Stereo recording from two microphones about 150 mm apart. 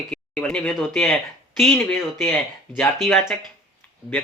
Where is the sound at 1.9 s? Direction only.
15° left (ahead or behind).